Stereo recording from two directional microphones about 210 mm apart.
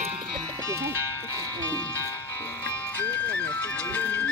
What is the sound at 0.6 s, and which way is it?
Music, 15° right (ahead or behind).